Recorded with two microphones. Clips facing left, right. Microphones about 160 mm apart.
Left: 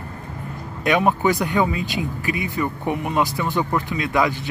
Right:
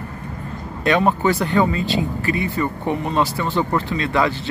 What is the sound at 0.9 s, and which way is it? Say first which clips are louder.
Speech: right 1 dB; 15° left (ahead or behind).